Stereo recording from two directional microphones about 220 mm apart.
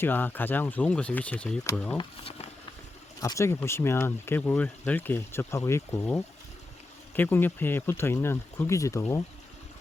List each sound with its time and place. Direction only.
0.0 s speech: 10° left (ahead or behind)
2.0 s speech: 25° left (ahead or behind)
3.2 s speech: 15° left (ahead or behind)